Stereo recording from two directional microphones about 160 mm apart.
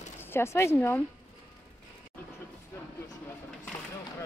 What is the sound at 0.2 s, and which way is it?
Speech, 15° left (ahead or behind).